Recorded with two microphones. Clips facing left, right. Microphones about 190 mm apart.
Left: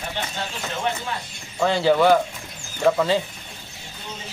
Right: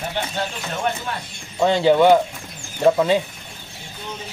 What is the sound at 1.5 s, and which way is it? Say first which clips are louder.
Speech: right 3 dB; 20° right (ahead or behind).